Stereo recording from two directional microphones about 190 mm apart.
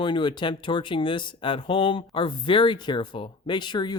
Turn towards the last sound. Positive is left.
turn(degrees=25)  # may be behind; listen again after turning